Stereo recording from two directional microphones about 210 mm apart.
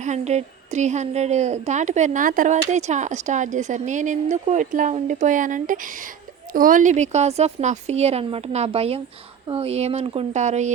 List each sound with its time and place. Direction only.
0.0 s a woman's voice: 35° right (ahead or behind)